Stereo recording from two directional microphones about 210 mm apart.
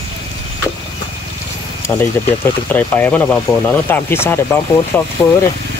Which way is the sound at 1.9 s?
15° left (ahead or behind).